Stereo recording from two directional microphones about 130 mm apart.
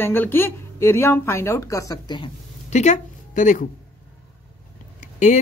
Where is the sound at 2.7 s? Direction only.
65° left (ahead or behind).